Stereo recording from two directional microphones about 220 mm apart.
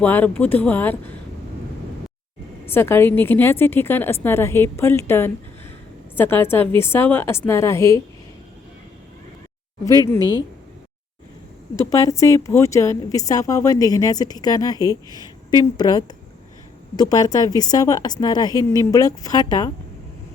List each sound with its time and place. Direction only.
0.0 s a woman's voice: 10° left (ahead or behind)
2.6 s a woman's voice: 10° left (ahead or behind)
10.1 s a woman's voice: 15° left (ahead or behind)
11.8 s a woman's voice: 15° left (ahead or behind)